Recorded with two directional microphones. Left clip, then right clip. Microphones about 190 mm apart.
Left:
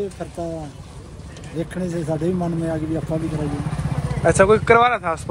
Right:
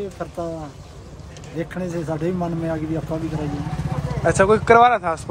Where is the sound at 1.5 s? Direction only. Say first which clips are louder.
Even; 5° left (ahead or behind).